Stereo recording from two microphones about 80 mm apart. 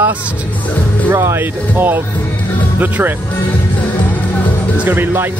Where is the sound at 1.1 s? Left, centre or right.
Right.